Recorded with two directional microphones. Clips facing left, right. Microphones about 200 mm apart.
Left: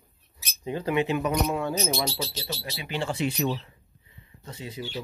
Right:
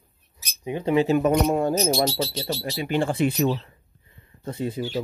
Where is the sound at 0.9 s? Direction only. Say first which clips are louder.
Right 6 dB; 40° right (ahead or behind).